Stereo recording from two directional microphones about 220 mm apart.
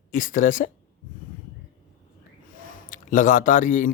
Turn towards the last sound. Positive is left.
turn(degrees=35)  # may be behind; listen again after turning